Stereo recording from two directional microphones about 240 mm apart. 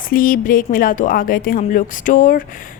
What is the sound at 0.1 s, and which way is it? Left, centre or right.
A woman's voice, left.